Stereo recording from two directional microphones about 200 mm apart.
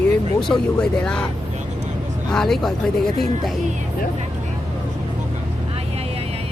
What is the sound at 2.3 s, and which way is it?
Speech, centre (ahead or behind).